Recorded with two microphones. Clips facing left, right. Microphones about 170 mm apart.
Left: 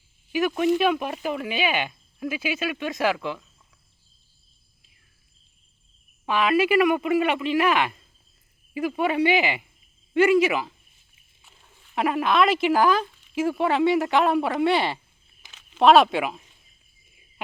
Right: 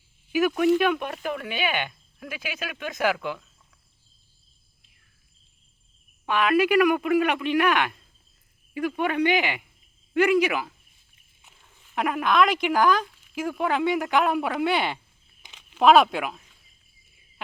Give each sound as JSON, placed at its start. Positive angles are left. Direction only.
{"t": 0.3, "sound": "speech", "side_deg": 0}
{"t": 6.2, "sound": "speech", "side_deg": 0}
{"t": 11.9, "sound": "speech", "side_deg": 0}
{"t": 15.4, "sound": "a sound", "side_deg": -15}
{"t": 15.8, "sound": "speech", "side_deg": 0}